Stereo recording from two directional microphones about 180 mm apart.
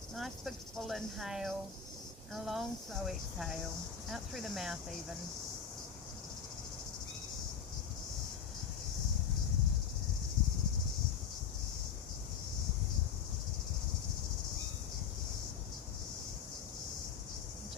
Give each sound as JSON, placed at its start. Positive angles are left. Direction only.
{"t": 0.2, "sound": "speech", "side_deg": 0}